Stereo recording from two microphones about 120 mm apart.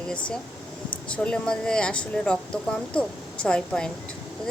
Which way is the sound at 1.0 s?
10° left (ahead or behind).